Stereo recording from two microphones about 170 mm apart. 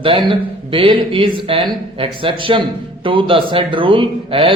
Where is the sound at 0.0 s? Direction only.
30° right (ahead or behind).